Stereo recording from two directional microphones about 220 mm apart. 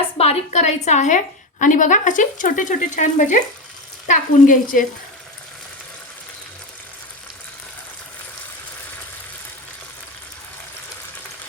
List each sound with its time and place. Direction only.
0.2 s a woman's voice: 30° left (ahead or behind)